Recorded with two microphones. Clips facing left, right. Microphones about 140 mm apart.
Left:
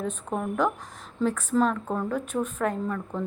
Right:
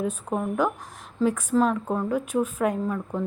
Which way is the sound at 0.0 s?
10° right (ahead or behind).